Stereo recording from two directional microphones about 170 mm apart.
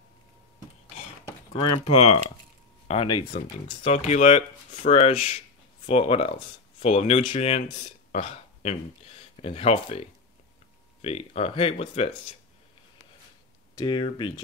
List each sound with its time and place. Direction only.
1.5 s speech: 35° left (ahead or behind)
13.7 s speech: 30° left (ahead or behind)